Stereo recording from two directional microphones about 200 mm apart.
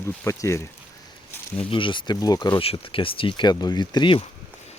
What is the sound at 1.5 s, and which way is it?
Speech, 25° left (ahead or behind).